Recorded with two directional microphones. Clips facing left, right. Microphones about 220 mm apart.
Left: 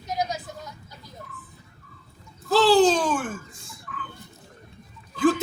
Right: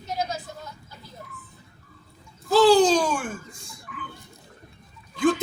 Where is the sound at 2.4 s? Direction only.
Centre (ahead or behind).